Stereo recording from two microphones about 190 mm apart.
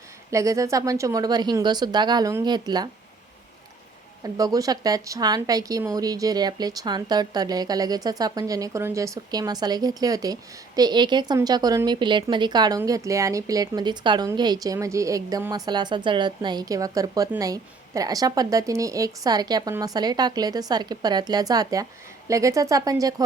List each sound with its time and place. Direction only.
0.3 s speech: 15° right (ahead or behind)
4.2 s speech: 20° right (ahead or behind)